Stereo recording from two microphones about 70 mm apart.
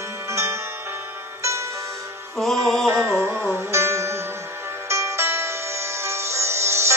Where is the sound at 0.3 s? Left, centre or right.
Right.